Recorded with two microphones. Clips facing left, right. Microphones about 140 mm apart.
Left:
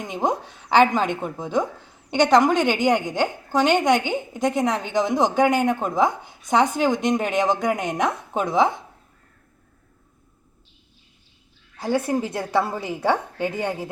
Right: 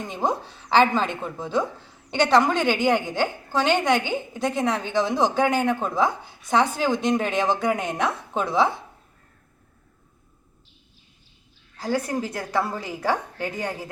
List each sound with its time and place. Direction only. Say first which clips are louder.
0.0 s a woman's voice: left 2 dB; 15° left (ahead or behind)
11.8 s a woman's voice: left 3 dB; 25° left (ahead or behind)